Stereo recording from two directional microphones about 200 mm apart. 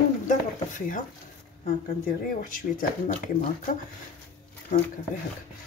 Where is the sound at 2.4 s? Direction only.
45° left (ahead or behind).